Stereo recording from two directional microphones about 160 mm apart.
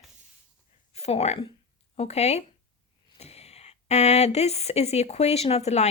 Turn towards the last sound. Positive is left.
turn(degrees=45)  # may be behind; listen again after turning